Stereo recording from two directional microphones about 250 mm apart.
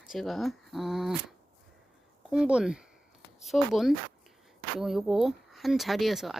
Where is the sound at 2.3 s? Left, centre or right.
Centre.